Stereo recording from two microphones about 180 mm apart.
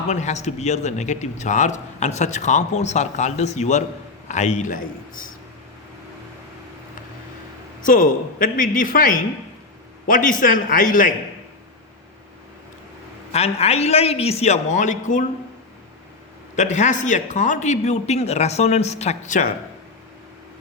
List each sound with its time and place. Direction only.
0.1 s a man's voice: 40° left (ahead or behind)
7.8 s a man's voice: 50° left (ahead or behind)
13.3 s a man's voice: 35° left (ahead or behind)
16.6 s a man's voice: 40° left (ahead or behind)